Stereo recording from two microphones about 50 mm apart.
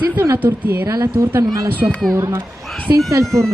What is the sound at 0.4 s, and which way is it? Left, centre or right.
Speech, right.